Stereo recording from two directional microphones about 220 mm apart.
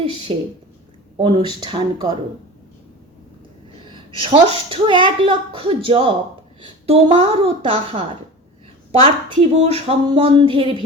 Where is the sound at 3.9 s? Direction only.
25° right (ahead or behind).